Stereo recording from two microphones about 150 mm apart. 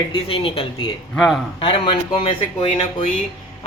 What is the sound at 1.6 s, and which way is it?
A woman's voice, 35° left (ahead or behind).